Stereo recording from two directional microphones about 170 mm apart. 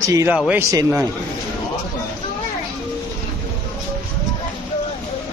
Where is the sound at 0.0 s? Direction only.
20° right (ahead or behind).